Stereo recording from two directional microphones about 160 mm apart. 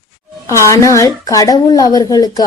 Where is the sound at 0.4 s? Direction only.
20° left (ahead or behind).